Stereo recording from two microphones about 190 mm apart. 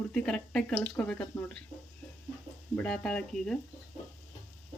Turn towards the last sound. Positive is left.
turn(degrees=5)  # may be behind; listen again after turning